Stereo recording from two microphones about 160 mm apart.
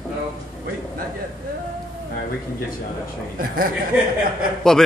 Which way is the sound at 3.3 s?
65° right (ahead or behind).